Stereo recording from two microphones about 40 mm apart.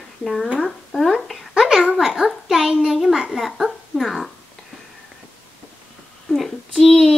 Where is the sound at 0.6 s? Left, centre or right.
Centre.